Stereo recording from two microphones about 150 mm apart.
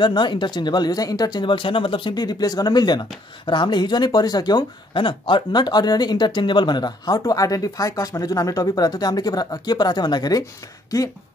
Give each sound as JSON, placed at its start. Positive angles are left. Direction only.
{"t": 0.0, "sound": "speech", "side_deg": 30}